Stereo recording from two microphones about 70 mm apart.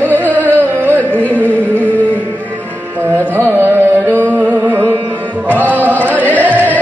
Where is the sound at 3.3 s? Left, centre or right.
Right.